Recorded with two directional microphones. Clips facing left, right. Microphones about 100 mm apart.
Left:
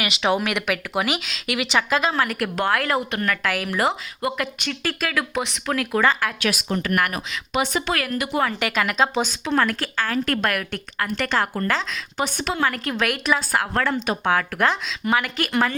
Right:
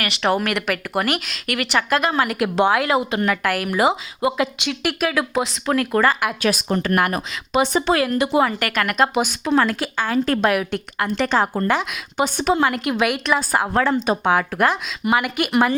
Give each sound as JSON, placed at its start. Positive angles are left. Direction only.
{"t": 0.0, "sound": "a woman's voice", "side_deg": 5}
{"t": 6.4, "sound": "a woman's voice", "side_deg": -40}
{"t": 8.4, "sound": "speech", "side_deg": -5}
{"t": 9.6, "sound": "a woman's voice", "side_deg": -20}